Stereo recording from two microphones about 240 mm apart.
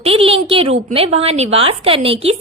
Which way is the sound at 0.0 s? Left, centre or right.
Right.